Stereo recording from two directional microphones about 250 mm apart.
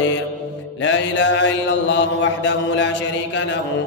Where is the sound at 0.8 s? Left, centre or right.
Left.